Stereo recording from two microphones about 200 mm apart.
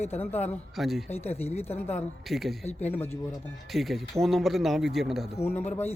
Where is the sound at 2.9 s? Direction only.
10° left (ahead or behind).